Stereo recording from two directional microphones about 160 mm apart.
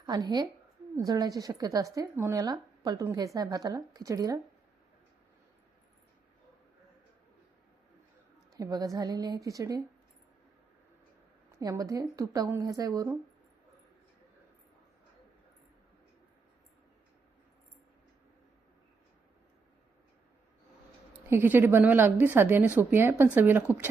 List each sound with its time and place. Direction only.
0.0 s a woman's voice: 25° right (ahead or behind)
8.5 s speech: 20° right (ahead or behind)
11.6 s speech: 20° right (ahead or behind)
21.1 s a woman's voice: 15° right (ahead or behind)